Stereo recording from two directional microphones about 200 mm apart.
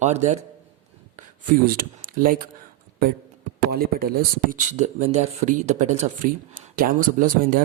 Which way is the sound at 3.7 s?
50° right (ahead or behind).